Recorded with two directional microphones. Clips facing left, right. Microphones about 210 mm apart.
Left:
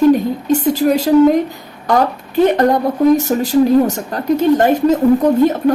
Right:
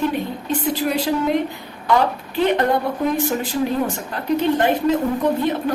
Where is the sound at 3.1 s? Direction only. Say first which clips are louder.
Left 8 dB; 40° left (ahead or behind).